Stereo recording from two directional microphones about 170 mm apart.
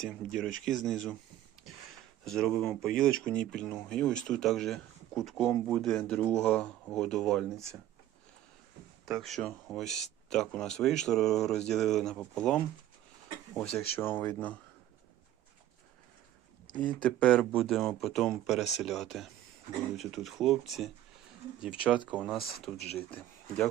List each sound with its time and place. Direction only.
0.0 s speech: 5° left (ahead or behind)
2.2 s speech: centre (ahead or behind)
7.5 s speech: 15° right (ahead or behind)
9.2 s speech: centre (ahead or behind)
16.8 s speech: 5° left (ahead or behind)